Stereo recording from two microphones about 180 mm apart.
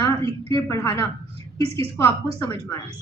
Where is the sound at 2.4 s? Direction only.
15° left (ahead or behind).